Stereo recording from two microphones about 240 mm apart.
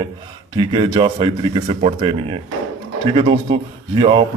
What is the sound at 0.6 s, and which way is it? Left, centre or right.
Speech, right.